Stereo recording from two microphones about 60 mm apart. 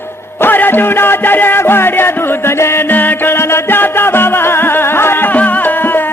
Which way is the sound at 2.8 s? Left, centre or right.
Left.